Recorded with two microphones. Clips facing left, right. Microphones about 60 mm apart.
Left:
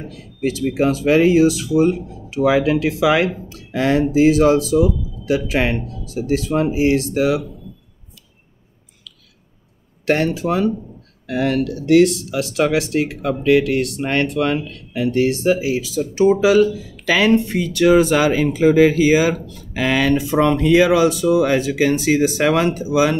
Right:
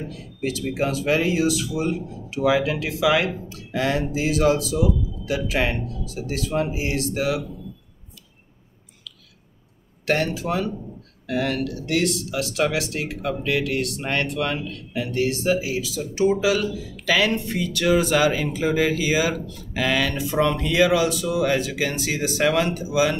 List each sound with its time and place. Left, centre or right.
0.4 s speech: left
10.0 s speech: left